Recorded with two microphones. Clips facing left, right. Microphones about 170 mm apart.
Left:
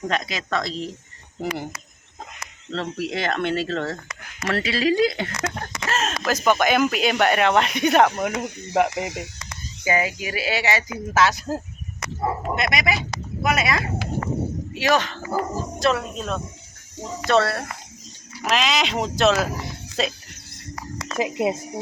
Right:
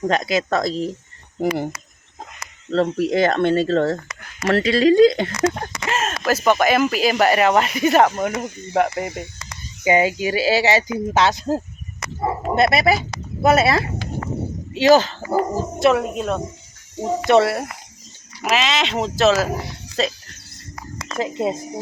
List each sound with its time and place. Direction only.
0.1 s speech: 40° right (ahead or behind)
2.6 s speech: 45° right (ahead or behind)
5.9 s speech: 10° right (ahead or behind)
8.4 s speech: 70° left (ahead or behind)
8.7 s speech: centre (ahead or behind)
9.0 s speech: 85° left
9.8 s speech: 25° right (ahead or behind)
12.2 s bow-wow: 10° right (ahead or behind)
12.5 s speech: 35° right (ahead or behind)
18.4 s speech: centre (ahead or behind)
21.2 s speech: 15° left (ahead or behind)